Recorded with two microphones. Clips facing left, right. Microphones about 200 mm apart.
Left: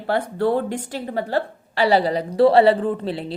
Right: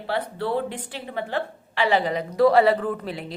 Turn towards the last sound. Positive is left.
turn(degrees=30)  # may be behind; listen again after turning